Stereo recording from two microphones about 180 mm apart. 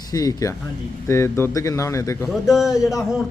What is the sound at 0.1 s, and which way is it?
A man's voice, 20° left (ahead or behind).